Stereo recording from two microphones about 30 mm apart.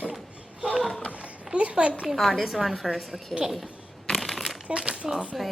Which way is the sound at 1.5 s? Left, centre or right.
Right.